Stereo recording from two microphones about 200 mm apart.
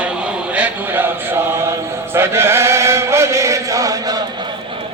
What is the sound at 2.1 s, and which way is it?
Chant, 10° right (ahead or behind).